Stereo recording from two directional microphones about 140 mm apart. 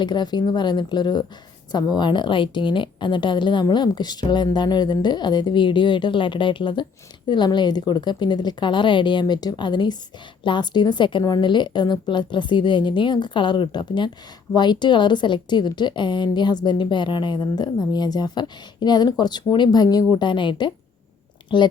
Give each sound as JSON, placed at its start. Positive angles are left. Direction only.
{"t": 0.0, "sound": "a woman's voice", "side_deg": 35}